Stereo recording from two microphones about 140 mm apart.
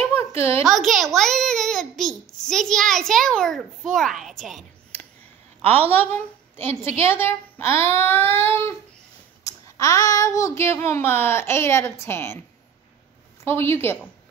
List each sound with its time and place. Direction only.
0.1 s a sound: 20° left (ahead or behind)
0.7 s a child's voice: centre (ahead or behind)
5.6 s a woman's voice: 15° left (ahead or behind)
13.5 s a child's voice: 15° left (ahead or behind)